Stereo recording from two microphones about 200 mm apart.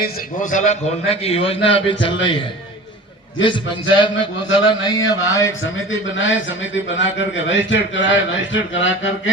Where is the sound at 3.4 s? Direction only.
25° left (ahead or behind).